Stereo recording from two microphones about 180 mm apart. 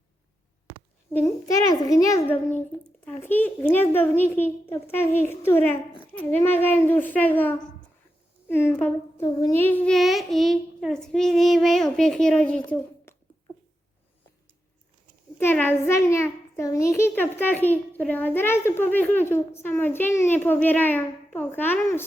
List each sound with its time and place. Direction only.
1.1 s a child's voice: 15° left (ahead or behind)
15.4 s a child's voice: 10° left (ahead or behind)